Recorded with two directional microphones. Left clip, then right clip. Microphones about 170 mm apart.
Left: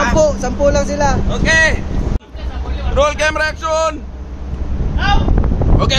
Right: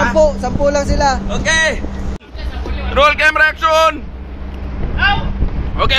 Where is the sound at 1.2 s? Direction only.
20° right (ahead or behind).